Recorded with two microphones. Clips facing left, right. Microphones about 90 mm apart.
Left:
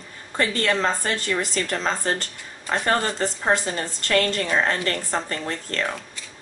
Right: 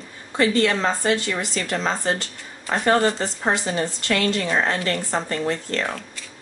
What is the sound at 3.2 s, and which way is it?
A woman's voice, 40° left (ahead or behind).